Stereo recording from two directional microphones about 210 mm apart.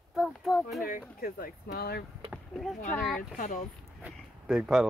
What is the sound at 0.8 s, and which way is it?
Speech, 45° left (ahead or behind).